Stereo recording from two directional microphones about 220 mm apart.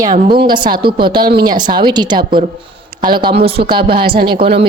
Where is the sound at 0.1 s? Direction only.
45° right (ahead or behind).